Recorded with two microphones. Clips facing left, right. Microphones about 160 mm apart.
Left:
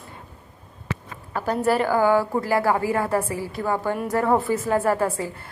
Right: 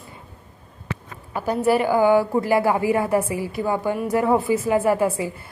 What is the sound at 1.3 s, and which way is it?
A woman's voice, 10° right (ahead or behind).